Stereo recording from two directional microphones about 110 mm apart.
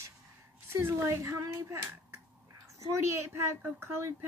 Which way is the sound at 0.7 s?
25° right (ahead or behind).